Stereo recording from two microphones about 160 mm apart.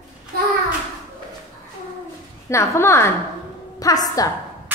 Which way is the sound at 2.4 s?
15° left (ahead or behind).